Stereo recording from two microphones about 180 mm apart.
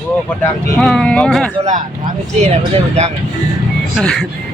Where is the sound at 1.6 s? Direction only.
45° right (ahead or behind).